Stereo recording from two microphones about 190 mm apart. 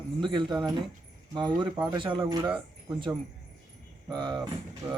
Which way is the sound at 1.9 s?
25° right (ahead or behind).